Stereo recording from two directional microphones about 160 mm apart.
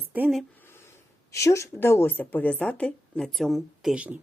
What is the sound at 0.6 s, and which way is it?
Speech, 15° left (ahead or behind).